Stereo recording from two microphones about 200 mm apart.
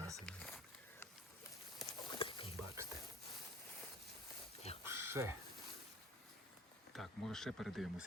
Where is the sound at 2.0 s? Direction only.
25° left (ahead or behind).